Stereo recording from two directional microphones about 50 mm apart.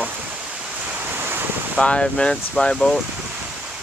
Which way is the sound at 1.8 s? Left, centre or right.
Centre.